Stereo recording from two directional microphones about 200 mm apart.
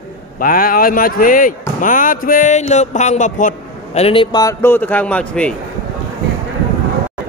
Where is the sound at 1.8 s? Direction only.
40° left (ahead or behind); by 5.5 s 5° left (ahead or behind).